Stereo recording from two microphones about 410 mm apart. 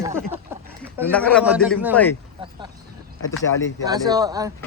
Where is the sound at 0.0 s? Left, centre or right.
Centre.